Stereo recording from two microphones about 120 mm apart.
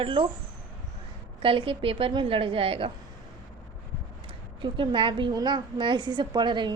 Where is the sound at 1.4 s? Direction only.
50° right (ahead or behind).